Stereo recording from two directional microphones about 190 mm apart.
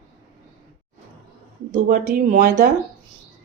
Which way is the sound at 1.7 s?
45° right (ahead or behind).